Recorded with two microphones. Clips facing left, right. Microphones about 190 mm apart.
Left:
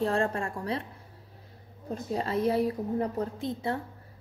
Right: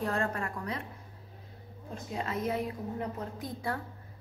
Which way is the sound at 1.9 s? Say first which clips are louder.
Left 6 dB; 35° left (ahead or behind).